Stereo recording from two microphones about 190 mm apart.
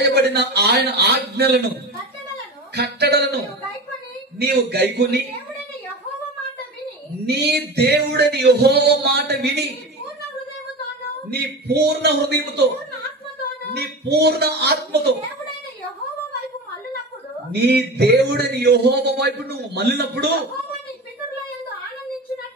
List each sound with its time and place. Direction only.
0.0 s a man's voice: 60° right (ahead or behind)
2.7 s a man's voice: 60° right (ahead or behind)
4.6 s a man's voice: 60° right (ahead or behind)
7.2 s a man's voice: 60° right (ahead or behind)
11.2 s a man's voice: 60° right (ahead or behind)
13.7 s a man's voice: 60° right (ahead or behind)
17.5 s a man's voice: 60° right (ahead or behind)